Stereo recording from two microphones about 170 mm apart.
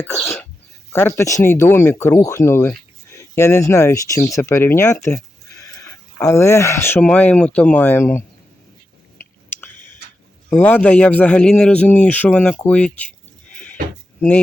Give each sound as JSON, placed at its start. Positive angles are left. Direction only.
{"t": 0.1, "sound": "a man's voice", "side_deg": 10}
{"t": 9.6, "sound": "chewing", "side_deg": 10}
{"t": 10.5, "sound": "a man's voice", "side_deg": 10}
{"t": 14.2, "sound": "speech", "side_deg": 5}